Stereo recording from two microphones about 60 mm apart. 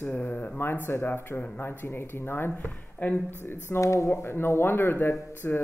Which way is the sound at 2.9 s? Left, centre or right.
Left.